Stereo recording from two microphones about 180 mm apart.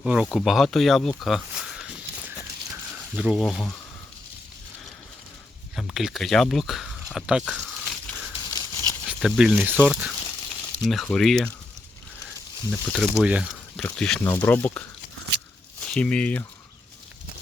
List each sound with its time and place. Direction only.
0.0 s speech: 5° right (ahead or behind)
5.7 s speech: centre (ahead or behind)
8.5 s horse: 20° left (ahead or behind)
9.0 s speech: 5° right (ahead or behind)
12.7 s speech: 5° left (ahead or behind)
15.9 s speech: 5° left (ahead or behind)